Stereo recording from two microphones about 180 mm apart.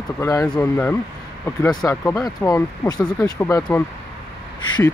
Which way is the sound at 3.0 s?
5° left (ahead or behind).